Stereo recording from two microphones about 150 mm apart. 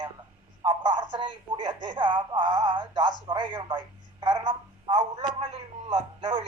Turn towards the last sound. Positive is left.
turn(degrees=-35)  # may be behind; listen again after turning